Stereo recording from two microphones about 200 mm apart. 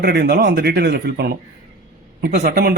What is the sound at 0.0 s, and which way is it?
Speech, 55° right (ahead or behind).